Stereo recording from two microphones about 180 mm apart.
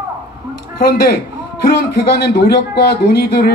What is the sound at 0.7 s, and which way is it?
Speech, 60° left (ahead or behind).